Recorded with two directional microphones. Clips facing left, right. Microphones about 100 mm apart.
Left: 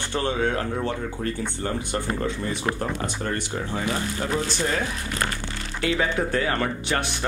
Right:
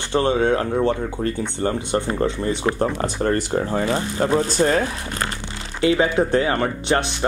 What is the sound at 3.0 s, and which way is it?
Speech, 40° right (ahead or behind).